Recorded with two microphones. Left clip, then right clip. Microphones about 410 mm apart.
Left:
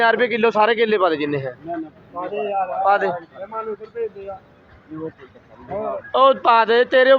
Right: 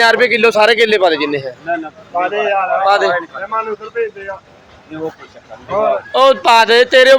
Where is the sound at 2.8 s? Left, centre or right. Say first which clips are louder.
Right 5 dB; left.